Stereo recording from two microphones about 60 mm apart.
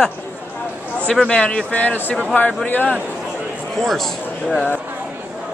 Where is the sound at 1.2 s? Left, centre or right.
Centre.